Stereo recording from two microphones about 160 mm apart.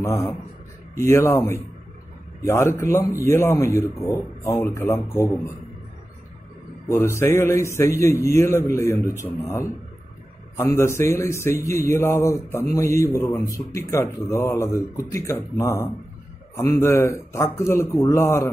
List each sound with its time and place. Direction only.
0.0 s a man's voice: 20° left (ahead or behind)
6.9 s a man's voice: 15° left (ahead or behind)